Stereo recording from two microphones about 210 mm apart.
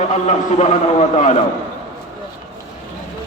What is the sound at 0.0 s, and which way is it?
A man's voice, 35° left (ahead or behind).